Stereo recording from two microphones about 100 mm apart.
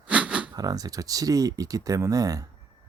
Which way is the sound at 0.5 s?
40° right (ahead or behind).